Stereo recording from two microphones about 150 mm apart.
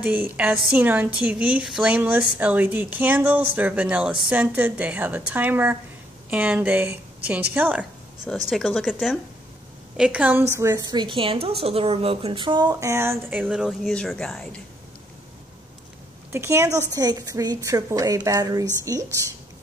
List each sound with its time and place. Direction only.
0.0 s a woman's voice: 10° right (ahead or behind)
16.3 s a woman's voice: 20° right (ahead or behind)